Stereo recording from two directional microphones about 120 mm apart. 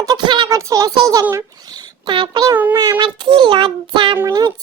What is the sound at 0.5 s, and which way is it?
A child's voice, 25° right (ahead or behind).